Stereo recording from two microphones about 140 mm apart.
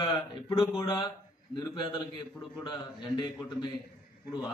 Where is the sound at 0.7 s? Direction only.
25° left (ahead or behind).